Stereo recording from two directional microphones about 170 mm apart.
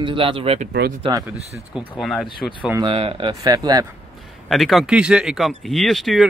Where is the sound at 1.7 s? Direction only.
Centre (ahead or behind).